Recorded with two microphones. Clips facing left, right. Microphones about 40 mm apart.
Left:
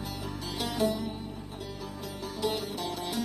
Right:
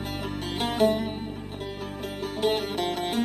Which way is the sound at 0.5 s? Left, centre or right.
Right.